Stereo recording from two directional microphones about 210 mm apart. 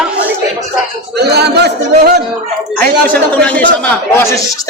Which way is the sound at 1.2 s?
50° right (ahead or behind).